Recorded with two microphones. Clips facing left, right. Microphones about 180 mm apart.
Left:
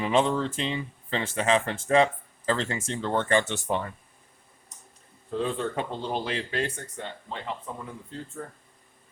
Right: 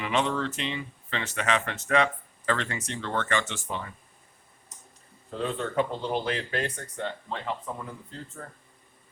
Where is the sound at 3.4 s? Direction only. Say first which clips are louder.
Left 6 dB; 60° left (ahead or behind).